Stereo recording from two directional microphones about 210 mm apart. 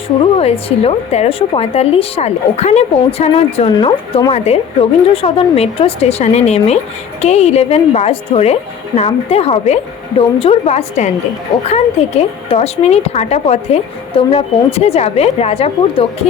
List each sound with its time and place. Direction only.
0.3 s a woman's voice: 30° left (ahead or behind)